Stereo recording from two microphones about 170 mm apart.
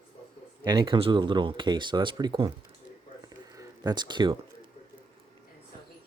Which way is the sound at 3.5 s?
20° right (ahead or behind).